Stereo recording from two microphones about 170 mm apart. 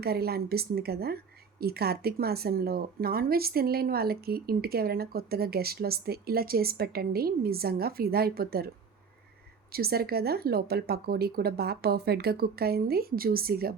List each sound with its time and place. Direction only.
0.0 s a woman's voice: 65° right (ahead or behind)
9.7 s a woman's voice: 65° right (ahead or behind)